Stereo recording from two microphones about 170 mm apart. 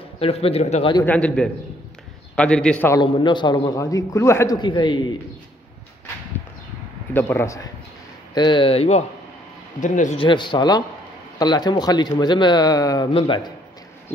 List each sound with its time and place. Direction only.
0.2 s speech: 35° left (ahead or behind)
1.0 s a man's voice: 5° left (ahead or behind)
3.0 s a man's voice: 25° left (ahead or behind)
7.2 s a man's voice: 15° left (ahead or behind)
8.4 s speech: 30° left (ahead or behind)
9.8 s a man's voice: 45° left (ahead or behind)
10.1 s a man's voice: 30° left (ahead or behind)